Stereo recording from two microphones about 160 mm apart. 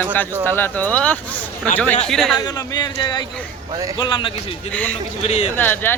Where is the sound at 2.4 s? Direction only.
25° left (ahead or behind).